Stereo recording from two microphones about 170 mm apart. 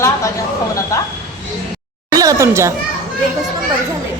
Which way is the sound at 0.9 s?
20° left (ahead or behind).